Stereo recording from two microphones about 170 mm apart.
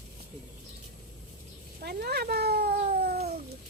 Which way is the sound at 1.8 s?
65° right (ahead or behind).